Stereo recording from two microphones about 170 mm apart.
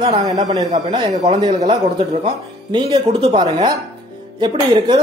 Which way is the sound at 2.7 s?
35° right (ahead or behind).